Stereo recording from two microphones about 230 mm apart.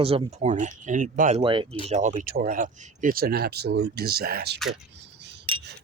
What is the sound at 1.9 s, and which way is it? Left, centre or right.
Speech, right.